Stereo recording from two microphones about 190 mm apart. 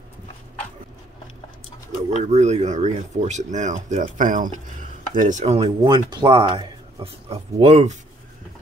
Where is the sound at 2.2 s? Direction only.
35° right (ahead or behind).